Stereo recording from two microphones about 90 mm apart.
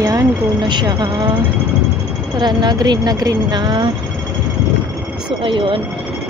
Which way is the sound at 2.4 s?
55° right (ahead or behind).